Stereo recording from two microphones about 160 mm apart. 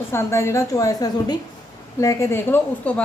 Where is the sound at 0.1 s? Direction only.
15° left (ahead or behind).